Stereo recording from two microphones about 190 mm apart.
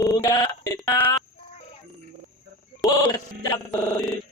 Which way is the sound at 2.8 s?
20° left (ahead or behind).